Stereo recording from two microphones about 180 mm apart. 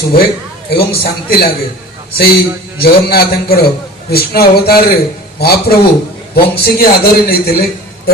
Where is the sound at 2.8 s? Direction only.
60° left (ahead or behind).